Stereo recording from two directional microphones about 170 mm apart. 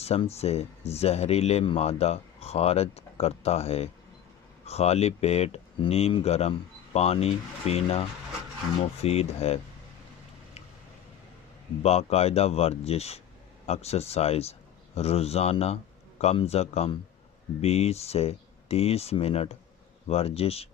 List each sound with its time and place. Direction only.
0.0 s speech: 35° left (ahead or behind)
11.8 s a man's voice: 40° left (ahead or behind)